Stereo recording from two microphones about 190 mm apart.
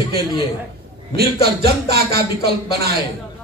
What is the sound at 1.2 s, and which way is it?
Speech, 55° right (ahead or behind).